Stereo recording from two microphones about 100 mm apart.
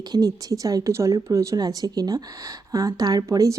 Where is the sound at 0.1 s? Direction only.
40° right (ahead or behind).